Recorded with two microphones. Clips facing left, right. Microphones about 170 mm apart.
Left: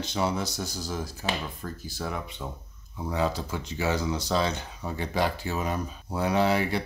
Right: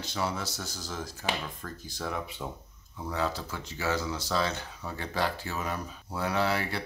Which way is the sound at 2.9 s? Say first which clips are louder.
Left 4 dB; 15° left (ahead or behind).